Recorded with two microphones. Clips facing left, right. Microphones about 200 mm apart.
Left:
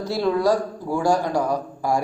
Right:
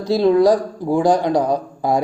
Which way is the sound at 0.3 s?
15° right (ahead or behind).